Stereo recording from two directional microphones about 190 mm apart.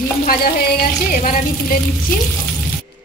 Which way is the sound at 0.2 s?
50° left (ahead or behind).